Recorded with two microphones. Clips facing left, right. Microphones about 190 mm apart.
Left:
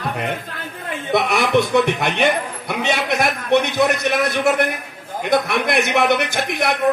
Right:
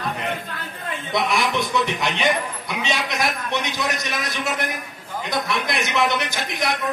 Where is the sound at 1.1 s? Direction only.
60° left (ahead or behind).